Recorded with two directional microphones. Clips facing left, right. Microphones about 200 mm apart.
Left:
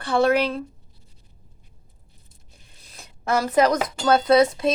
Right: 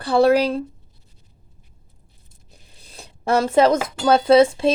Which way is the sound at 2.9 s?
30° right (ahead or behind).